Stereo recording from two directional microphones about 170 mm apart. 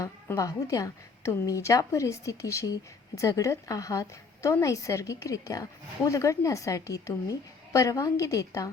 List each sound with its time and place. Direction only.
0.0 s a woman's voice: 20° left (ahead or behind)